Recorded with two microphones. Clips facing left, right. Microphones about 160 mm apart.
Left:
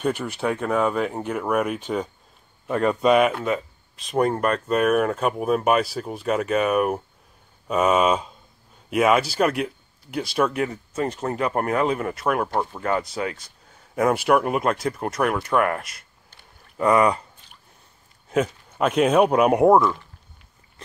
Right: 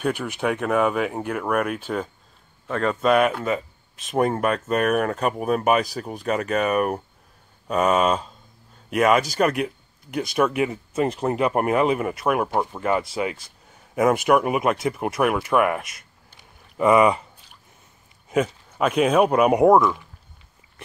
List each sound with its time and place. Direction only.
0.3 s speech: 10° right (ahead or behind)
2.6 s speech: 15° left (ahead or behind)
3.0 s speech: centre (ahead or behind)
18.3 s speech: 5° right (ahead or behind)